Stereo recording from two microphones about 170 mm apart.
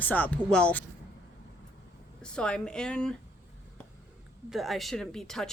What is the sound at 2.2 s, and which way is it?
Speech, 5° left (ahead or behind).